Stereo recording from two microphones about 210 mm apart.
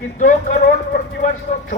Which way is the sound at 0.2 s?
40° left (ahead or behind).